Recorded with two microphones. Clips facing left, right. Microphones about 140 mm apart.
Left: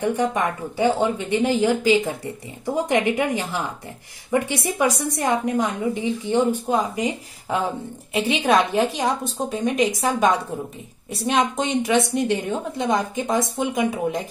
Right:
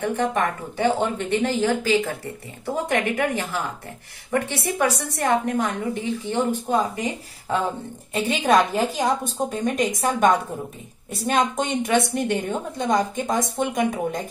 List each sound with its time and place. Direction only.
0.0 s a woman's voice: 15° left (ahead or behind)
8.1 s a woman's voice: centre (ahead or behind)